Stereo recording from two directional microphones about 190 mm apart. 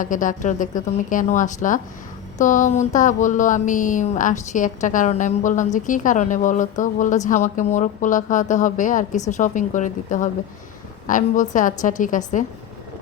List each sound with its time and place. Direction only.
0.0 s speech: 45° left (ahead or behind)